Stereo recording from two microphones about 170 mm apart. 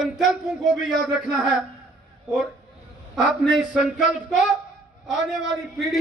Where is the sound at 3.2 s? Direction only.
Centre (ahead or behind).